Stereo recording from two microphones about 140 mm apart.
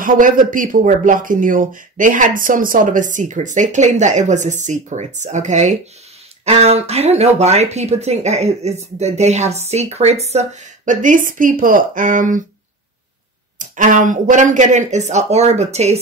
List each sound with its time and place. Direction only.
0.0 s speech: 75° right (ahead or behind)
13.6 s speech: 65° right (ahead or behind)